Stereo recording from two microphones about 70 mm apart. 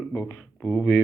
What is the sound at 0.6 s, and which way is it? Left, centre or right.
Speech, centre.